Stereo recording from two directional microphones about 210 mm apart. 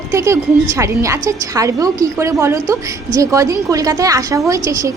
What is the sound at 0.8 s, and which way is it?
Speech, 15° right (ahead or behind).